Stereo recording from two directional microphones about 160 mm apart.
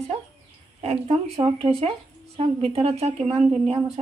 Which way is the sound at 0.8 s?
40° right (ahead or behind).